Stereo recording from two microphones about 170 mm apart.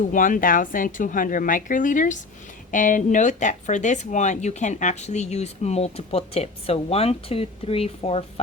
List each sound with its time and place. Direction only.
0.1 s speech: 50° left (ahead or behind); by 8.2 s 35° left (ahead or behind)